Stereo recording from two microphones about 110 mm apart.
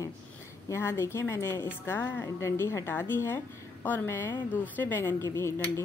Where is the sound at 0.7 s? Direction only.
25° left (ahead or behind).